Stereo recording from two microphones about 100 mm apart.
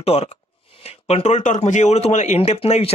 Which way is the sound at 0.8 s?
90° left.